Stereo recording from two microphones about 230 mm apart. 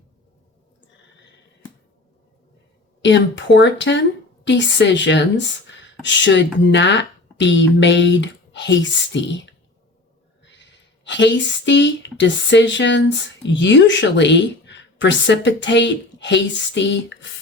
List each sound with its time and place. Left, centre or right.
3.0 s a woman's voice: left